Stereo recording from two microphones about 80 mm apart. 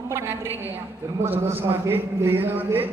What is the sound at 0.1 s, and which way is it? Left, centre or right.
A man's voice, right.